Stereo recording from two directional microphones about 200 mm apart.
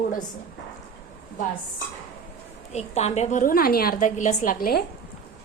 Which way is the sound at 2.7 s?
35° left (ahead or behind).